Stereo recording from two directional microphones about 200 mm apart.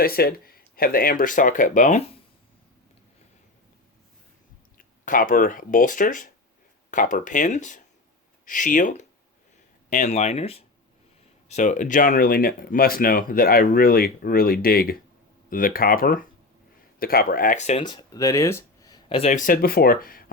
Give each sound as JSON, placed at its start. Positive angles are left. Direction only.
{"t": 0.0, "sound": "speech", "side_deg": 50}
{"t": 4.8, "sound": "speech", "side_deg": 45}
{"t": 17.8, "sound": "speech", "side_deg": 20}